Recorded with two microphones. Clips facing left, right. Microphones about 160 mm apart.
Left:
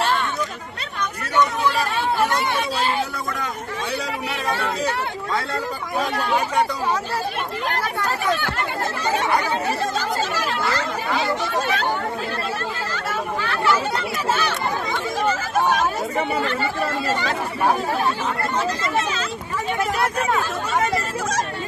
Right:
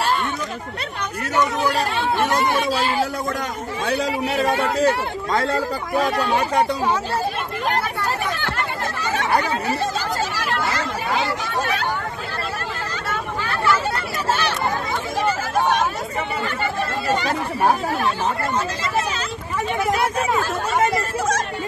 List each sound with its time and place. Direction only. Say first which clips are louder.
4.3 s speech: right 4 dB; 45° right (ahead or behind)
6.1 s speech: left 2 dB; 30° right (ahead or behind)